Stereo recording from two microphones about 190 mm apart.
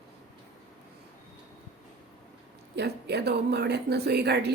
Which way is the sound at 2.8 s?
60° right (ahead or behind).